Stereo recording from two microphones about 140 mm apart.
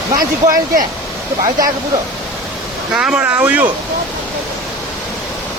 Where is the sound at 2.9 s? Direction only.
5° right (ahead or behind).